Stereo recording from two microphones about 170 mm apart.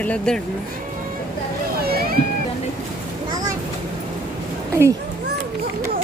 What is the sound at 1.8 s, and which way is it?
Boat, 65° right (ahead or behind).